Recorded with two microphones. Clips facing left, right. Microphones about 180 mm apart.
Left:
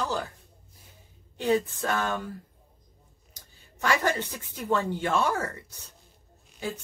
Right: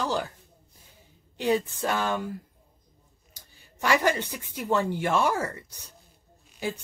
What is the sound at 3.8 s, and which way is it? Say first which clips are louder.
Speech: right 2 dB; 15° right (ahead or behind).